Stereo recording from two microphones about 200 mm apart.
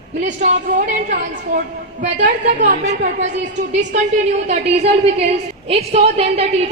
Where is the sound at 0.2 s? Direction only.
35° right (ahead or behind).